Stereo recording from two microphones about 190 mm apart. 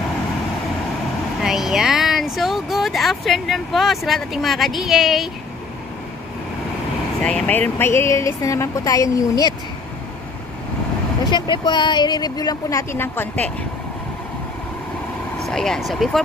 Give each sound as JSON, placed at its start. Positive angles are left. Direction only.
{"t": 1.4, "sound": "speech", "side_deg": 0}
{"t": 7.2, "sound": "speech", "side_deg": 5}
{"t": 11.2, "sound": "speech", "side_deg": 25}
{"t": 15.4, "sound": "speech", "side_deg": 0}